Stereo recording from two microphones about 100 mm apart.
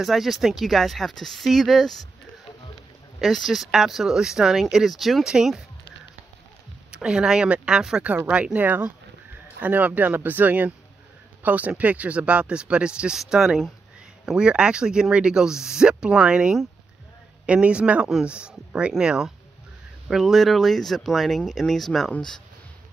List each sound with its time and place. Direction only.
0.0 s speech: centre (ahead or behind)
3.2 s speech: centre (ahead or behind)
6.9 s speech: 10° right (ahead or behind)